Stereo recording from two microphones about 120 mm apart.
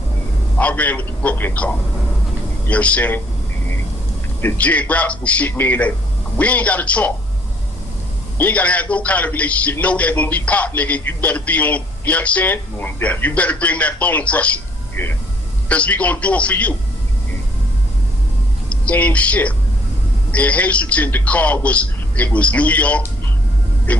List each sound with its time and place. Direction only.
0.6 s a man's voice: 10° left (ahead or behind)
4.4 s a man's voice: 15° left (ahead or behind)
8.4 s a man's voice: 15° left (ahead or behind)
18.7 s a man's voice: 10° left (ahead or behind)